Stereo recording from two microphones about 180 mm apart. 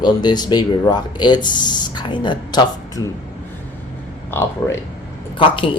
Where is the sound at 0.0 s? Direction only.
25° left (ahead or behind).